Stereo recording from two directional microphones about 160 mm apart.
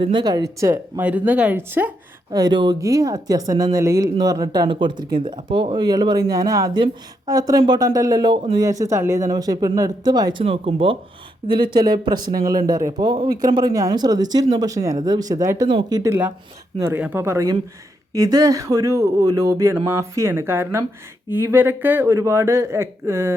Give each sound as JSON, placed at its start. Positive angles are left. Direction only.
{"t": 0.0, "sound": "speech", "side_deg": -30}
{"t": 2.3, "sound": "speech", "side_deg": -25}
{"t": 10.4, "sound": "speech", "side_deg": -35}